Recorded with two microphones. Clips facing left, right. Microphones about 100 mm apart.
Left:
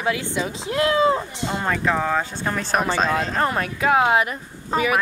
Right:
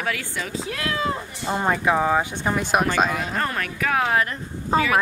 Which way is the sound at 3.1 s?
25° left (ahead or behind).